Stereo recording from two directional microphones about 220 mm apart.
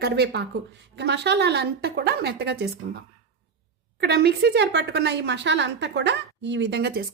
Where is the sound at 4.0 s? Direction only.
45° right (ahead or behind).